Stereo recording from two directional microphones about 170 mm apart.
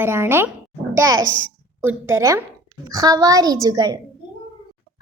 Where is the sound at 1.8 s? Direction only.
15° right (ahead or behind).